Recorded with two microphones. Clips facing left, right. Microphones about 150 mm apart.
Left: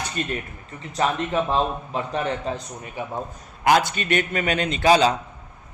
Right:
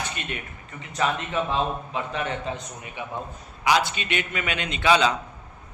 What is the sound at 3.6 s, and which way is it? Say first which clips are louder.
A man's voice: left 4 dB; 50° left (ahead or behind).